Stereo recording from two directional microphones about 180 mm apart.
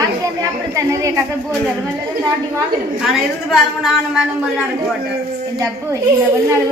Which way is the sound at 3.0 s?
Centre (ahead or behind).